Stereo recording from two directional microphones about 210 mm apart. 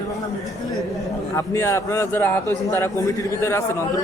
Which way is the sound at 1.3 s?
10° left (ahead or behind).